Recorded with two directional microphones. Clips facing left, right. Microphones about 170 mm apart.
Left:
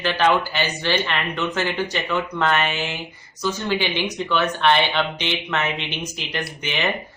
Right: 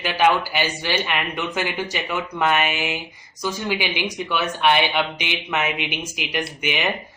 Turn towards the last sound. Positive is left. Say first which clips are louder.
# right 2 dB
turn(degrees=-10)  # may be behind; listen again after turning